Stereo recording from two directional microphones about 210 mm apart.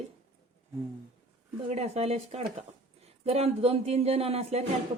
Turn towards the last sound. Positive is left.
turn(degrees=-30)  # may be behind; listen again after turning